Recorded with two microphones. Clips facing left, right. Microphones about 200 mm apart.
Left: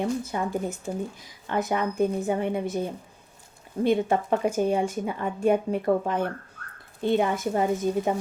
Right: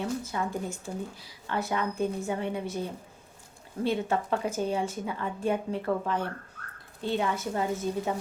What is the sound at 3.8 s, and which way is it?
A woman's voice, 15° left (ahead or behind).